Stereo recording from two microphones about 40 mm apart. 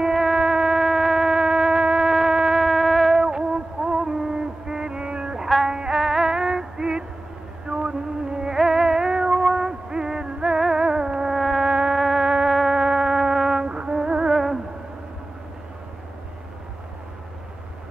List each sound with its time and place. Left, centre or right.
0.0 s a sound: centre
2.6 s music: centre
3.2 s music: centre
5.4 s music: centre
5.9 s female singing: centre
7.6 s a sound: right
8.5 s music: centre
11.3 s insect: centre
11.6 s insect: centre
12.0 s music: centre
13.7 s music: right
14.3 s a sound: centre